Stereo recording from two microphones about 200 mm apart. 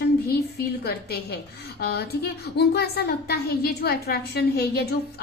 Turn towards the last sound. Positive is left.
turn(degrees=55)  # may be behind; listen again after turning